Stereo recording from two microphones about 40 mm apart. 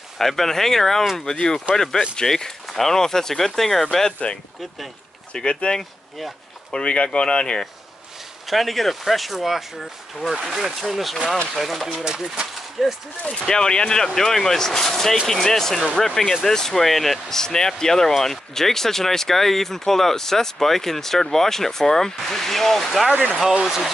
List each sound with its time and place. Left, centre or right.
0.2 s speech: centre
5.3 s speech: left
5.8 s speech: centre
6.7 s speech: left
8.5 s speech: centre
12.0 s speech: centre
13.3 s speech: centre